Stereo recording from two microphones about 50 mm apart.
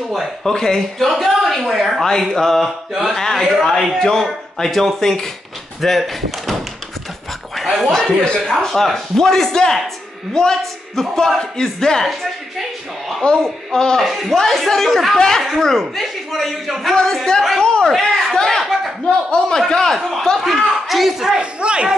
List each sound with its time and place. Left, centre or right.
0.1 s speech: centre
2.0 s speech: centre
2.9 s speech: centre
3.2 s speech: centre
7.5 s chuckle: centre
7.9 s speech: centre
13.2 s a child's voice: left
13.7 s speech: centre
14.0 s speech: centre
19.7 s speech: centre
21.3 s speech: right